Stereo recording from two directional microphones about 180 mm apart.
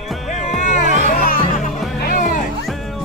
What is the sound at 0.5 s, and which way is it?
Music, 45° left (ahead or behind).